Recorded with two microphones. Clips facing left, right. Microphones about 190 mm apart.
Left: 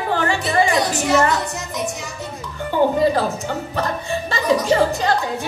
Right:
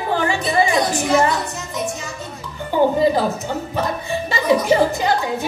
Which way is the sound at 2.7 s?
15° right (ahead or behind).